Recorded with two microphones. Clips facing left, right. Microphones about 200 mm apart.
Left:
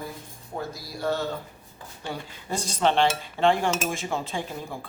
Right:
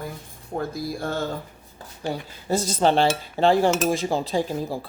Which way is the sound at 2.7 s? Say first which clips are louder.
Right 2 dB; 35° right (ahead or behind).